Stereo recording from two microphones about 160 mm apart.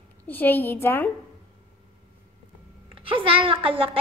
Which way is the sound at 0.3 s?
10° left (ahead or behind).